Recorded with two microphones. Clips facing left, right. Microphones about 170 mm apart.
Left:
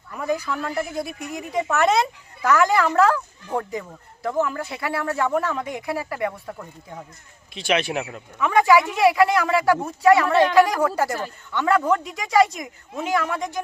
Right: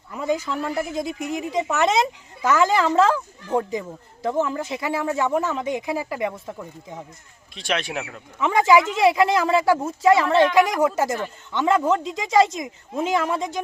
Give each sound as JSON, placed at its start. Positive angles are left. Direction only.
{"t": 0.1, "sound": "a woman's voice", "side_deg": -20}
{"t": 7.5, "sound": "speech", "side_deg": 0}
{"t": 8.4, "sound": "a woman's voice", "side_deg": -25}